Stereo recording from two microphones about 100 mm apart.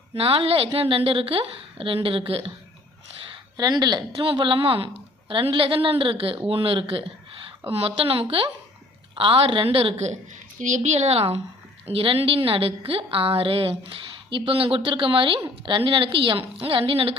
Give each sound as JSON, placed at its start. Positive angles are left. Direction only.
{"t": 0.2, "sound": "a woman's voice", "side_deg": -75}
{"t": 3.6, "sound": "a woman's voice", "side_deg": -45}
{"t": 10.9, "sound": "a woman's voice", "side_deg": -90}
{"t": 11.9, "sound": "a woman's voice", "side_deg": -65}